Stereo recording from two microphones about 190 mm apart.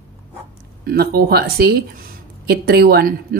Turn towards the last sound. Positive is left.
turn(degrees=-55)  # may be behind; listen again after turning